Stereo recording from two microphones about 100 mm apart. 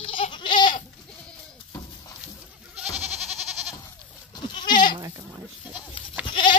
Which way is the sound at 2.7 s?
10° right (ahead or behind).